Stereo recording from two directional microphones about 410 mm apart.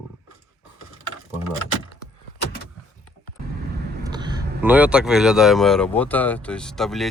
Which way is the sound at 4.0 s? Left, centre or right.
Centre.